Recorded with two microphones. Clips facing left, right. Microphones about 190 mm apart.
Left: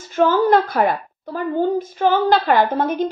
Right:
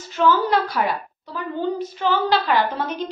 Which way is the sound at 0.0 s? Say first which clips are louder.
Left 3 dB; 50° left (ahead or behind).